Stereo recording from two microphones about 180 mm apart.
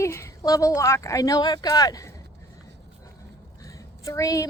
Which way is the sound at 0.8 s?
15° left (ahead or behind).